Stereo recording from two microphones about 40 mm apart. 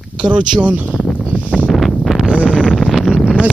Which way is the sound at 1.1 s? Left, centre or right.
Left.